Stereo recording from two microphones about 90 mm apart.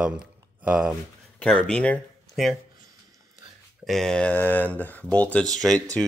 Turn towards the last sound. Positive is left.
turn(degrees=5)  # may be behind; listen again after turning